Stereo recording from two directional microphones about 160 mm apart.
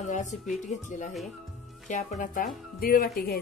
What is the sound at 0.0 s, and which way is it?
Music, 50° left (ahead or behind).